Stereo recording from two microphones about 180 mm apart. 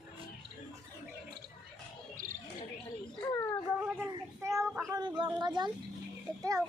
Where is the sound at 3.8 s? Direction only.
10° right (ahead or behind).